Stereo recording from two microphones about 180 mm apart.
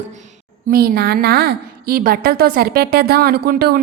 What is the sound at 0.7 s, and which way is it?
A woman's voice, 55° right (ahead or behind).